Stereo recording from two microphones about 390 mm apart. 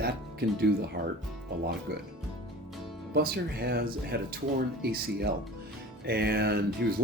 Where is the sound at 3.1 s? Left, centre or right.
Right.